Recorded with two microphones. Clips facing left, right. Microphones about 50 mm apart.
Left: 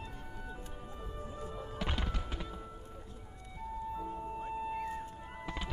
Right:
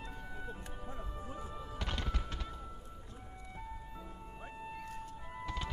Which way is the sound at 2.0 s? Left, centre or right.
Centre.